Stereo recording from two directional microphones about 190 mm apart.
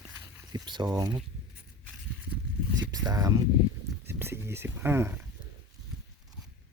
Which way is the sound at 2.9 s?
20° right (ahead or behind).